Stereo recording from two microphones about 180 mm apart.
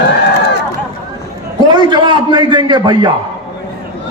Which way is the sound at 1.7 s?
25° right (ahead or behind).